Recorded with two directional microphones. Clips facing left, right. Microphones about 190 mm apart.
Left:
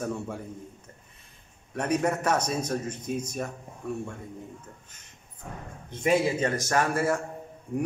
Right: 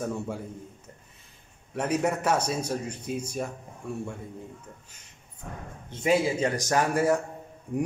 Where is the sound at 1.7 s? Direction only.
5° right (ahead or behind).